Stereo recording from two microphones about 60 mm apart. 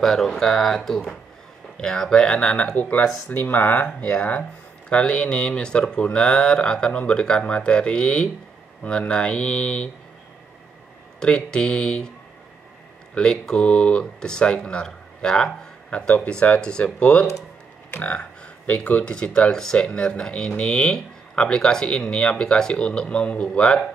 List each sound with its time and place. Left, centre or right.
0.0 s speech: centre
11.1 s speech: centre
13.1 s speech: centre